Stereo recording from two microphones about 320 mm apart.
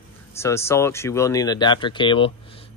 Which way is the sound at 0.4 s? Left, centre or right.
Centre.